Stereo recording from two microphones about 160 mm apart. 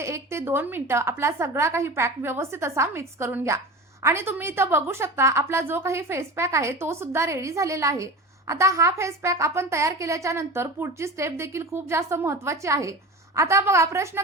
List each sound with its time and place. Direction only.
0.0 s a woman's voice: 15° right (ahead or behind)